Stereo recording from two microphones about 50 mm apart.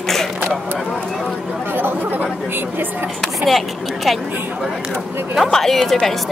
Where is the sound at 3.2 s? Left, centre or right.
Centre.